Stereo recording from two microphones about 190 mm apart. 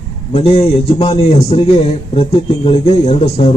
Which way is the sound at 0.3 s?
30° left (ahead or behind).